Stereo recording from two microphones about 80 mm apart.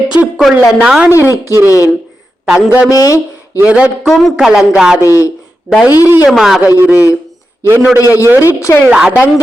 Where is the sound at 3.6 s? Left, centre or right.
Centre.